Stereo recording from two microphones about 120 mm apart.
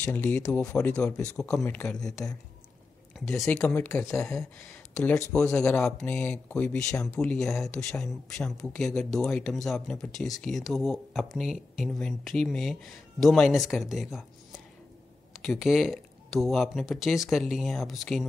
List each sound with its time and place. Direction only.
0.0 s speech: 15° left (ahead or behind)
3.6 s speech: 15° left (ahead or behind)
4.2 s speech: 5° left (ahead or behind)
15.3 s speech: centre (ahead or behind)